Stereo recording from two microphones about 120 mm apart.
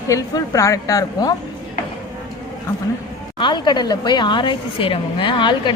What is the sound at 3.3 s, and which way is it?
A woman's voice, 40° left (ahead or behind).